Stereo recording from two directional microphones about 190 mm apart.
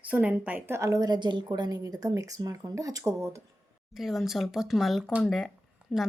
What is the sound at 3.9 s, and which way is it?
Speech, centre (ahead or behind).